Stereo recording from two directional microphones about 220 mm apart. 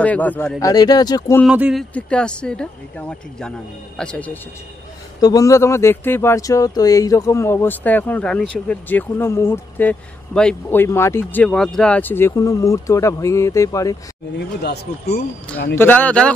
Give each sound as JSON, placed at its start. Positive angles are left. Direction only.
{"t": 0.0, "sound": "speech", "side_deg": 5}
{"t": 1.4, "sound": "speech", "side_deg": -5}
{"t": 14.6, "sound": "speech", "side_deg": 45}
{"t": 15.7, "sound": "speech", "side_deg": 10}